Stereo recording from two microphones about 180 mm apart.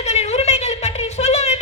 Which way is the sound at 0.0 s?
40° left (ahead or behind).